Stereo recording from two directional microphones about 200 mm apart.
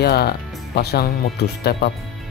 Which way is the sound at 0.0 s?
55° left (ahead or behind).